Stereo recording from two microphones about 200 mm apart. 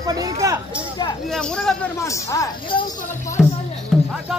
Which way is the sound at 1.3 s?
5° left (ahead or behind).